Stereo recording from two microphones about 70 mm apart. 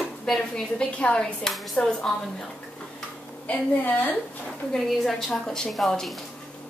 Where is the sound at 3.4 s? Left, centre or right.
Left.